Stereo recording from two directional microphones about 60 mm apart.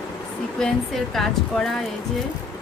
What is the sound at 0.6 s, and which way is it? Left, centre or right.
Speech, centre.